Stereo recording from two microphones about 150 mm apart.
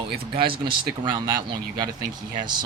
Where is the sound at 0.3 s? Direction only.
35° right (ahead or behind).